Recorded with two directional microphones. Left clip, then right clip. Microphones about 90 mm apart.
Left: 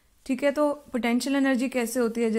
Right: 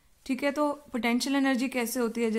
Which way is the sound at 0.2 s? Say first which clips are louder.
Left 4 dB; 15° left (ahead or behind).